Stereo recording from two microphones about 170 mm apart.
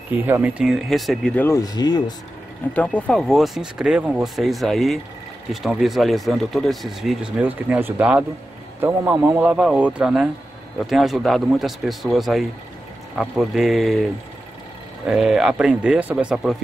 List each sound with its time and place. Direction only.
0.2 s speech: 10° right (ahead or behind); by 1.6 s 10° left (ahead or behind)
1.6 s speech: 25° left (ahead or behind)
2.7 s a man's voice: 10° left (ahead or behind)
15.0 s speech: 5° right (ahead or behind)